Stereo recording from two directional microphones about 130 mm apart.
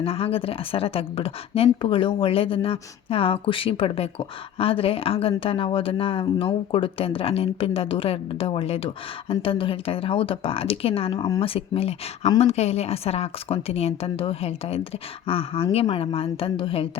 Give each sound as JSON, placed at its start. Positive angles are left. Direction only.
{"t": 0.0, "sound": "speech", "side_deg": 45}